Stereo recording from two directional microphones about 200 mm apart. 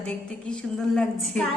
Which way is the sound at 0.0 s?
5° left (ahead or behind).